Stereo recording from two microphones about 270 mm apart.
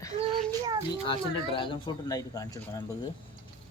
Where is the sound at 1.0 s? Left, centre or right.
Centre.